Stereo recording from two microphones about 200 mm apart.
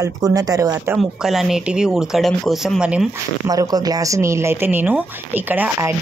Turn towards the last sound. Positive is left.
turn(degrees=-10)  # may be behind; listen again after turning